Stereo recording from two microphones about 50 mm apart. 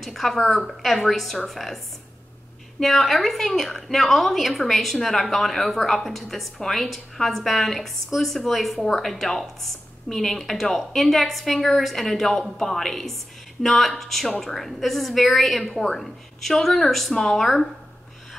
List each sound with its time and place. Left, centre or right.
0.0 s a woman's voice: centre
2.8 s a woman's voice: centre